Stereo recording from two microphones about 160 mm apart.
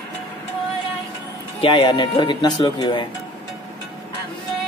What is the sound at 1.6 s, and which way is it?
A man's voice, 30° left (ahead or behind).